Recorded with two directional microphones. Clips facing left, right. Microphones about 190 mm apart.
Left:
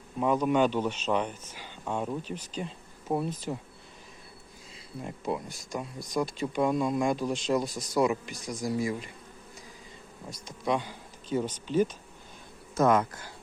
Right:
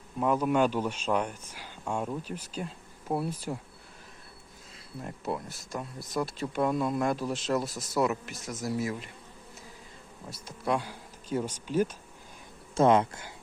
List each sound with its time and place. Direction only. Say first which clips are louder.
0.2 s speech: left 1 dB; centre (ahead or behind)
5.0 s speech: left 2 dB; 5° right (ahead or behind)
10.2 s speech: left 1 dB; 5° right (ahead or behind)
12.7 s speech: right 1 dB; 30° right (ahead or behind)